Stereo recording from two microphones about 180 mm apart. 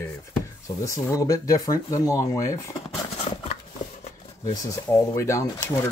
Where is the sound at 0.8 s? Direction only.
15° left (ahead or behind).